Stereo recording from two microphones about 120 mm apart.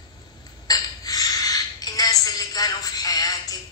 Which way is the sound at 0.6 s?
30° left (ahead or behind).